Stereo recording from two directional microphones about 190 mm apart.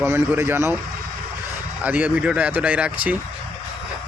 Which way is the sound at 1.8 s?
10° right (ahead or behind).